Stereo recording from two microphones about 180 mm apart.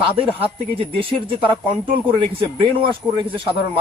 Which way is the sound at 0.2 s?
30° right (ahead or behind).